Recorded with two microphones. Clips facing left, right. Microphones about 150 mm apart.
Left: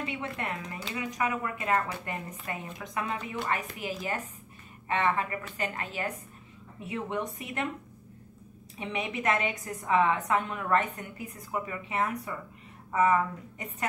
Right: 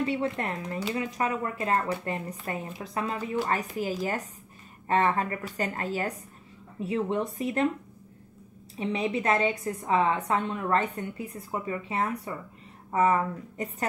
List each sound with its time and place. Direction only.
0.0 s a woman's voice: 35° right (ahead or behind)
8.7 s a woman's voice: 30° right (ahead or behind)